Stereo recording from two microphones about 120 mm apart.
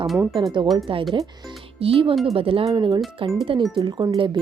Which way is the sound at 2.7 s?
35° right (ahead or behind).